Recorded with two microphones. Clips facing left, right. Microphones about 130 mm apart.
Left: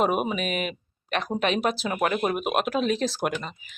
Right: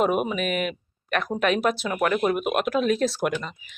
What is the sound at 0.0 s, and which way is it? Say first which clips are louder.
Speech: right 1 dB; 30° left (ahead or behind).